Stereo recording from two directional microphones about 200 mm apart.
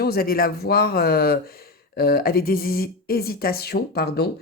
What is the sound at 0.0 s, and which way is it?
A woman's voice, 50° left (ahead or behind).